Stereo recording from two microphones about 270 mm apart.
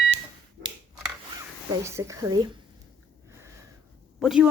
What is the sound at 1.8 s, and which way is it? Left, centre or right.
Speech, centre.